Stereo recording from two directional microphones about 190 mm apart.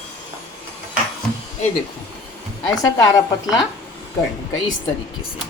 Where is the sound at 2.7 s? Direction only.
20° left (ahead or behind).